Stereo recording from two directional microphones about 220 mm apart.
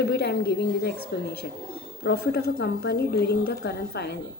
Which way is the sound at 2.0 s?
50° left (ahead or behind).